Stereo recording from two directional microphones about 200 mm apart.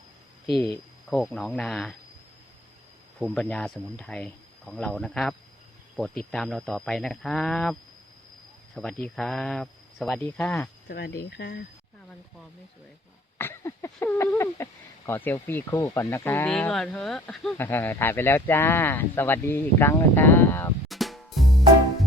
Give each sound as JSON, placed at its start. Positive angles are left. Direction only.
{"t": 1.1, "sound": "speech", "side_deg": 0}
{"t": 3.2, "sound": "speech", "side_deg": 5}
{"t": 10.8, "sound": "speech", "side_deg": 55}
{"t": 13.4, "sound": "speech", "side_deg": 15}
{"t": 20.8, "sound": "drum kit", "side_deg": 0}